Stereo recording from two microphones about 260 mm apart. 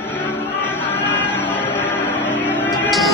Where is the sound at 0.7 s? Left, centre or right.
Centre.